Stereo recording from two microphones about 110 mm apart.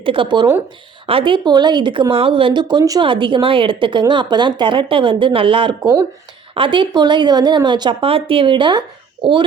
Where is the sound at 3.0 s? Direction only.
50° right (ahead or behind).